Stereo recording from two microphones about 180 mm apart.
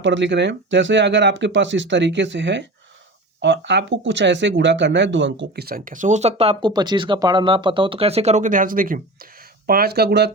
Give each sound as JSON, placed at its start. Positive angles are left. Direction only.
{"t": 0.0, "sound": "speech", "side_deg": -90}